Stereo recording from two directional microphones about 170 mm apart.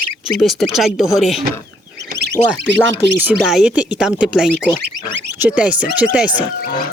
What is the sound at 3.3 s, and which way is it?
Speech, 5° right (ahead or behind).